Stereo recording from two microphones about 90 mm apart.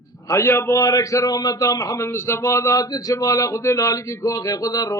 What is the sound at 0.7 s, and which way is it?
A man's voice, 45° left (ahead or behind).